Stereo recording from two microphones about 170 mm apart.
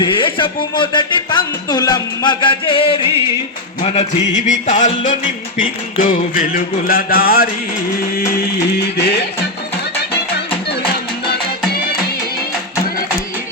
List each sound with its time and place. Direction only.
0.0 s speech: 30° left (ahead or behind)
3.8 s music: 40° left (ahead or behind)
5.6 s mantra: 55° left (ahead or behind)
9.0 s music: 75° left (ahead or behind)
11.3 s music: 65° left (ahead or behind)